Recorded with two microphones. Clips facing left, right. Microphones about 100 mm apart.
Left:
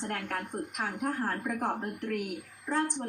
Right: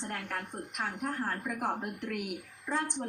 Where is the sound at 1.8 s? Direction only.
15° right (ahead or behind).